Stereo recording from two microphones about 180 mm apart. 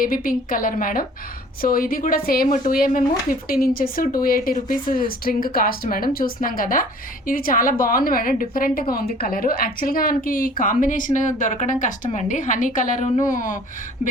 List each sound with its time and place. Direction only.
0.0 s a woman's voice: 50° left (ahead or behind)